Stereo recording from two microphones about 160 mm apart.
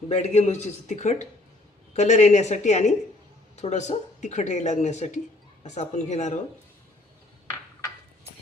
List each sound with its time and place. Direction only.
0.1 s speech: 45° left (ahead or behind)